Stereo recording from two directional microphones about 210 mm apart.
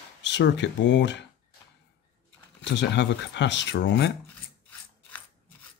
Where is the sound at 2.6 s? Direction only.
55° left (ahead or behind).